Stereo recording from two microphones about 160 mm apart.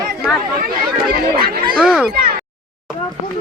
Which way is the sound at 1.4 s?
65° right (ahead or behind).